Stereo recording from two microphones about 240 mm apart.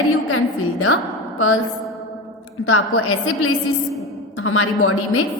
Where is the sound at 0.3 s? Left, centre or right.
Left.